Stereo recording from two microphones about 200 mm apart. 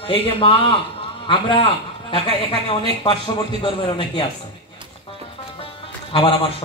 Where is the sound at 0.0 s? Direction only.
25° left (ahead or behind).